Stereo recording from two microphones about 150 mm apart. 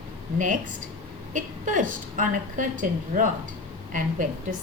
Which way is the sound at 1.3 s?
60° right (ahead or behind).